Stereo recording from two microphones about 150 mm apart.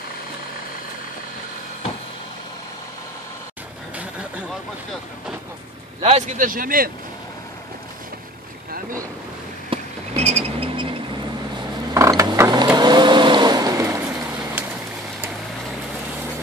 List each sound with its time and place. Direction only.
6.0 s speech: 45° right (ahead or behind)
6.3 s speech: 65° right (ahead or behind)
9.7 s a sound: 45° right (ahead or behind)
11.9 s mechanisms: 20° right (ahead or behind)
12.7 s vehicle: 30° right (ahead or behind)